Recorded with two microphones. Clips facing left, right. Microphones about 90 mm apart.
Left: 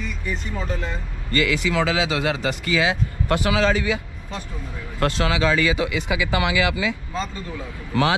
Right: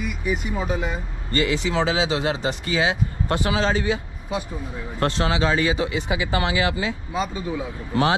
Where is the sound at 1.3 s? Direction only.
30° right (ahead or behind).